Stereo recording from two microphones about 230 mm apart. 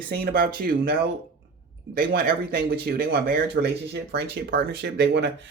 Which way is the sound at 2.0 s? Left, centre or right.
Right.